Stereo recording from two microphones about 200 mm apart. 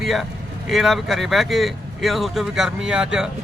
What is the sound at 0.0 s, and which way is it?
Speech, centre (ahead or behind).